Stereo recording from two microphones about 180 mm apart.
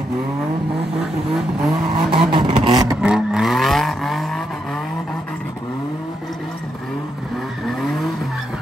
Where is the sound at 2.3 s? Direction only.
25° right (ahead or behind).